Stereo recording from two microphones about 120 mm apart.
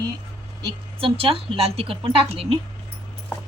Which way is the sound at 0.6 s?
50° right (ahead or behind).